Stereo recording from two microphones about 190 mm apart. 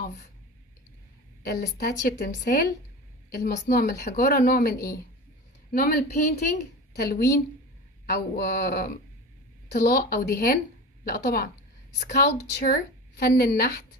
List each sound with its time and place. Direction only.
1.5 s a woman's voice: 55° left (ahead or behind)
12.6 s a woman's voice: 55° left (ahead or behind)